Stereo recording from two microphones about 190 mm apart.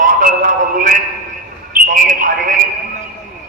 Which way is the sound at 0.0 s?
45° right (ahead or behind).